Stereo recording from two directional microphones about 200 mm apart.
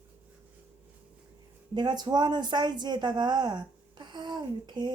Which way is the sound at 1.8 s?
20° right (ahead or behind).